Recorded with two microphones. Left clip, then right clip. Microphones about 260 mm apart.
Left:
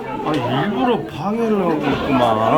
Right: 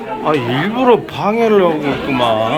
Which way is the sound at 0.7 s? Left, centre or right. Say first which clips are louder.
Right 7 dB; centre.